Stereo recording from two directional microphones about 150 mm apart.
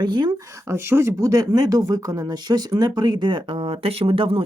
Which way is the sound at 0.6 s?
15° right (ahead or behind).